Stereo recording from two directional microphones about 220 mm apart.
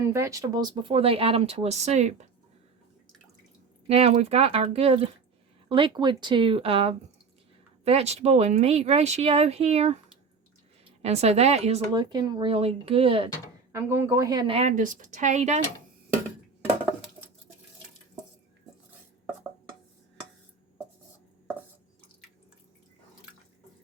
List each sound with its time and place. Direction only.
0.0 s speech: 15° right (ahead or behind); by 2.2 s 30° right (ahead or behind)
3.8 s speech: 25° right (ahead or behind)
11.0 s speech: 30° right (ahead or behind)
13.7 s a woman's voice: 10° right (ahead or behind); by 15.6 s 30° right (ahead or behind)